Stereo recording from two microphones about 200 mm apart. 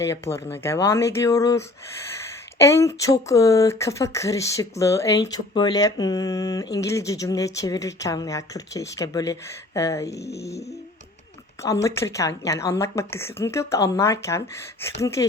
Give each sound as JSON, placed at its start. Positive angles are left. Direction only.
{"t": 0.0, "sound": "speech", "side_deg": 15}